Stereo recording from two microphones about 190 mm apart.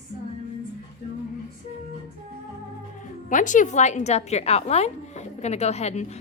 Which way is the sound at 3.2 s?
40° left (ahead or behind).